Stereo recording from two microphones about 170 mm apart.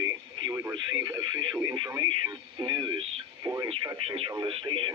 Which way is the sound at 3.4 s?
20° right (ahead or behind).